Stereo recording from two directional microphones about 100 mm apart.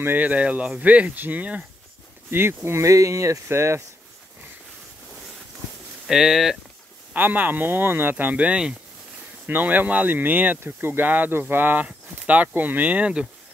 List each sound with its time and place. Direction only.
0.0 s speech: 15° right (ahead or behind)
6.0 s speech: 5° right (ahead or behind)
7.2 s speech: 20° right (ahead or behind)